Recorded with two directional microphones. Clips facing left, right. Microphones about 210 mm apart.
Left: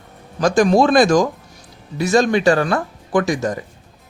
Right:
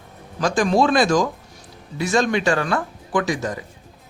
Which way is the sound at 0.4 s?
40° left (ahead or behind).